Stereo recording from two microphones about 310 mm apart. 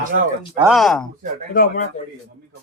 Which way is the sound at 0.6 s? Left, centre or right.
Centre.